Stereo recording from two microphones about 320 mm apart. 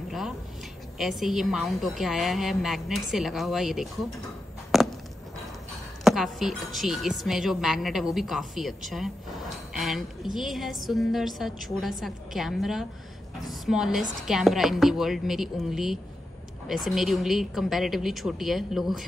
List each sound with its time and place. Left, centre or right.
0.9 s a woman's voice: centre
4.7 s chop: centre
6.0 s a woman's voice: centre